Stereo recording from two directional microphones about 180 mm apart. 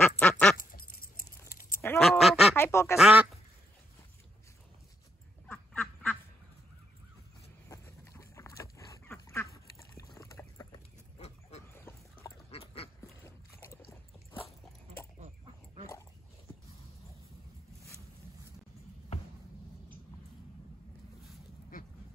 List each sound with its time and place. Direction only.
0.2 s quack: 5° left (ahead or behind)
0.6 s duck: 50° left (ahead or behind)
1.5 s a sound: 50° left (ahead or behind)
1.8 s a sound: 10° left (ahead or behind)
2.0 s quack: centre (ahead or behind)
2.5 s quack: 15° left (ahead or behind)
3.0 s speech: 5° right (ahead or behind)
5.5 s duck: 5° left (ahead or behind)
7.6 s duck: 15° left (ahead or behind)
11.1 s a sound: 40° left (ahead or behind)
11.9 s a sound: 15° left (ahead or behind)
12.4 s duck: 30° left (ahead or behind)
15.1 s chicken: 35° right (ahead or behind)